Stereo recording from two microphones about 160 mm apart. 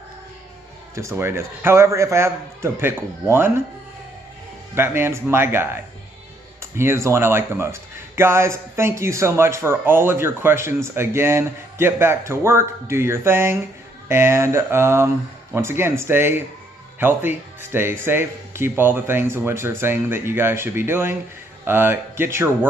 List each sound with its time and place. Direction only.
0.9 s speech: 15° right (ahead or behind)
4.7 s speech: 15° right (ahead or behind)